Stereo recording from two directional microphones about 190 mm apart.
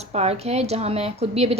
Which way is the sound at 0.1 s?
35° right (ahead or behind).